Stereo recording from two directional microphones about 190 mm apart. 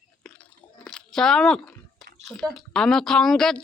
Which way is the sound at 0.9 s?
5° left (ahead or behind).